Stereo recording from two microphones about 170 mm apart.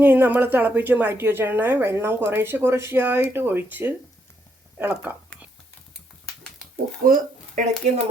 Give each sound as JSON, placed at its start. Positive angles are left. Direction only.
{"t": 0.0, "sound": "speech", "side_deg": -10}
{"t": 7.0, "sound": "speech", "side_deg": -50}